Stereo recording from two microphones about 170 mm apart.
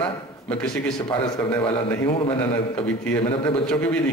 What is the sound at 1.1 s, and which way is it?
Speech, 30° left (ahead or behind).